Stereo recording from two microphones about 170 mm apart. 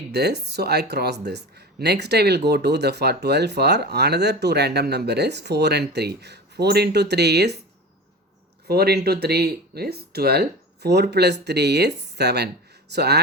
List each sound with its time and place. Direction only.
0.1 s speech: 70° right (ahead or behind)
8.6 s speech: 70° right (ahead or behind)